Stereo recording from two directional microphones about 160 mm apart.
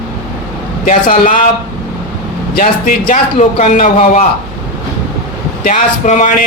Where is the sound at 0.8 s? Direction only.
55° left (ahead or behind).